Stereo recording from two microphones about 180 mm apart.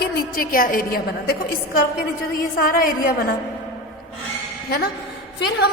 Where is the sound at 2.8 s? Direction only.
55° left (ahead or behind).